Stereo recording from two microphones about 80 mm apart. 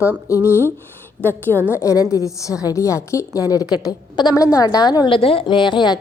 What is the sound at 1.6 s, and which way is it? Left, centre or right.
Speech, right.